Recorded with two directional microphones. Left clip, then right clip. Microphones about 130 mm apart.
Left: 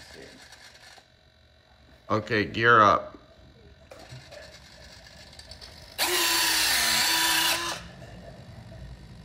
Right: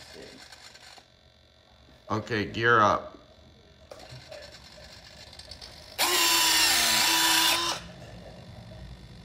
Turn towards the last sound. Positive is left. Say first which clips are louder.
# right 1 dB
turn(degrees=0)  # may be behind; listen again after turning